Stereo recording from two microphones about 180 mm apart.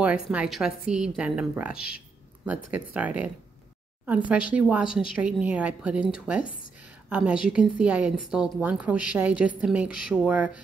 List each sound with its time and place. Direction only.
0.0 s a woman's voice: 5° right (ahead or behind)
4.3 s a woman's voice: 5° right (ahead or behind)